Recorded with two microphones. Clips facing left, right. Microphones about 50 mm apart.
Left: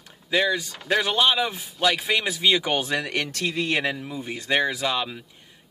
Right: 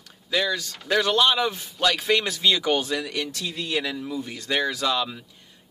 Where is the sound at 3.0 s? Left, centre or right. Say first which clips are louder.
Left 2 dB; left.